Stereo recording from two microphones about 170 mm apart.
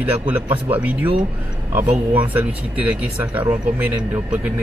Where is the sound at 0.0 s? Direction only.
10° right (ahead or behind).